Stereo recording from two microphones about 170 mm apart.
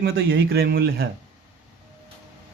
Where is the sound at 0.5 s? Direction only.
70° right (ahead or behind).